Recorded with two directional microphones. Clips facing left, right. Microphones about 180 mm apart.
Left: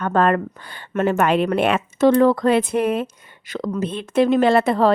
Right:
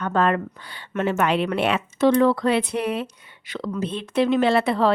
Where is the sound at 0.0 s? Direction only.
50° left (ahead or behind).